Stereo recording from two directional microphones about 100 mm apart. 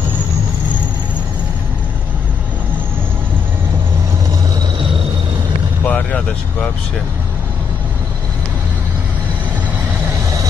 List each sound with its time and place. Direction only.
5.9 s vehicle: 15° left (ahead or behind)